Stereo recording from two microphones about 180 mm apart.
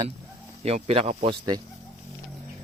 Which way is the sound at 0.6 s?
35° right (ahead or behind).